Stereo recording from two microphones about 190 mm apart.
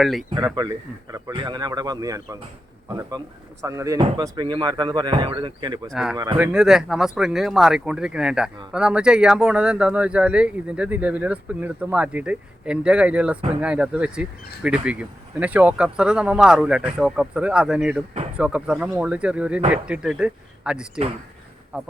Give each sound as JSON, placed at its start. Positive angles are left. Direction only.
{"t": 0.0, "sound": "speech", "side_deg": 0}
{"t": 0.3, "sound": "speech", "side_deg": -20}
{"t": 5.9, "sound": "speech", "side_deg": -5}